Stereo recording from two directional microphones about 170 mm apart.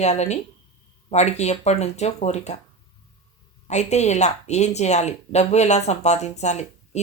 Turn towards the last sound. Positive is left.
turn(degrees=40)  # may be behind; listen again after turning